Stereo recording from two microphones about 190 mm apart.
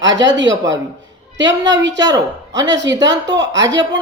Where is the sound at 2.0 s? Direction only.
20° right (ahead or behind).